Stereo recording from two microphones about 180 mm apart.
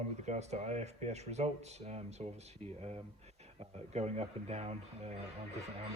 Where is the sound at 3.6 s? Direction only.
35° right (ahead or behind).